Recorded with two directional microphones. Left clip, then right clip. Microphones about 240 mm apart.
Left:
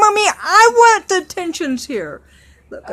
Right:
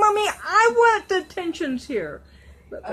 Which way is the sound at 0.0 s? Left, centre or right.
Left.